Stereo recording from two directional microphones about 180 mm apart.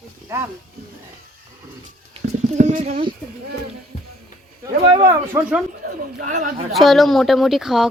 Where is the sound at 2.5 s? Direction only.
40° right (ahead or behind).